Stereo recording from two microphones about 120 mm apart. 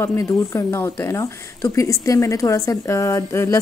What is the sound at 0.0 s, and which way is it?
Speech, 25° left (ahead or behind).